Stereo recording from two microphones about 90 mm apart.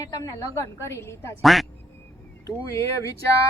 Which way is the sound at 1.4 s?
Centre (ahead or behind).